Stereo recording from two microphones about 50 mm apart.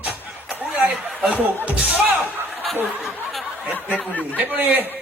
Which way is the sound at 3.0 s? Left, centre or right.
Centre.